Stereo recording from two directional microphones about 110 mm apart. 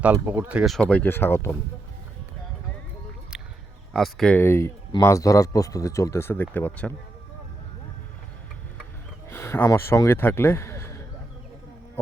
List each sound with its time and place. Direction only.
0.0 s speech: 15° right (ahead or behind)
0.8 s speech: 10° left (ahead or behind)
3.9 s speech: 5° left (ahead or behind)
4.4 s speech: 25° left (ahead or behind)
9.3 s speech: 20° left (ahead or behind)